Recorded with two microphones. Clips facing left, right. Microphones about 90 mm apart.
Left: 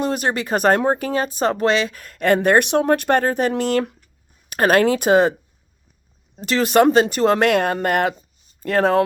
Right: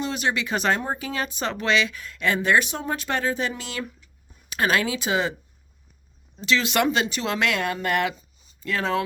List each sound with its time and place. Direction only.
0.0 s speech: 45° left (ahead or behind)
6.4 s speech: 45° left (ahead or behind)